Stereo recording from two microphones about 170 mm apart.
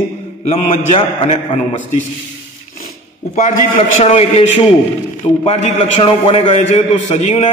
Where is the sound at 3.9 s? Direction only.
40° left (ahead or behind).